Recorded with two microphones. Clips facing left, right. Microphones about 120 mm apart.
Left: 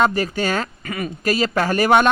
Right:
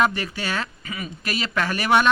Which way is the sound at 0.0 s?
35° left (ahead or behind).